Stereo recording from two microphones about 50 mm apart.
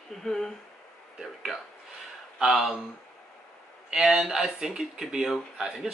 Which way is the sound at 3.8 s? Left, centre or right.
Centre.